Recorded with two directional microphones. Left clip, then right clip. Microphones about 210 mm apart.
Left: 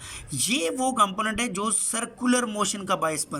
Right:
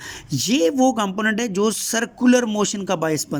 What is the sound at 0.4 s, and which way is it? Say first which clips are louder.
A man's voice: right 8 dB; 25° right (ahead or behind).